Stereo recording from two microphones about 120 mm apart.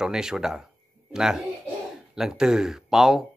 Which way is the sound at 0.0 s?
5° right (ahead or behind).